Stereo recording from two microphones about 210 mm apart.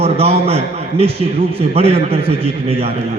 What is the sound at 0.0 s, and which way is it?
A man's voice, 30° right (ahead or behind).